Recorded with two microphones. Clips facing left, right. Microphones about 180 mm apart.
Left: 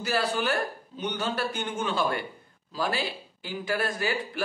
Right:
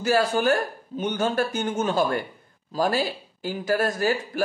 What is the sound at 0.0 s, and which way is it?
A man's voice, 45° right (ahead or behind).